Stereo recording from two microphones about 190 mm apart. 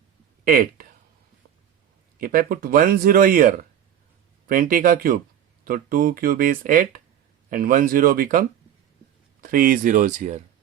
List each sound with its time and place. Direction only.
0.4 s speech: 50° right (ahead or behind)
2.1 s speech: 50° right (ahead or behind)